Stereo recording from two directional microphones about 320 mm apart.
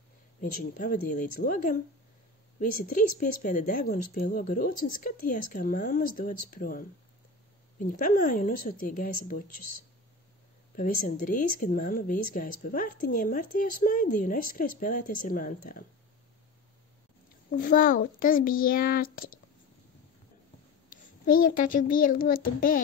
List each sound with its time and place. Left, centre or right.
0.4 s speech: left
10.8 s speech: left
17.5 s speech: left
21.5 s speech: left